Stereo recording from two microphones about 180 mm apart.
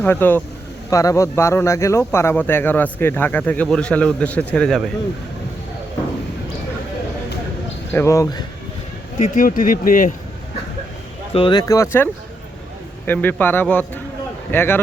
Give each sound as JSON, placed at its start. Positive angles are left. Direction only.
{"t": 0.0, "sound": "a man's voice", "side_deg": 10}
{"t": 7.9, "sound": "a man's voice", "side_deg": 15}
{"t": 9.1, "sound": "speech", "side_deg": 40}
{"t": 11.3, "sound": "speech", "side_deg": 30}
{"t": 11.6, "sound": "a man's voice", "side_deg": 15}
{"t": 13.1, "sound": "a man's voice", "side_deg": 10}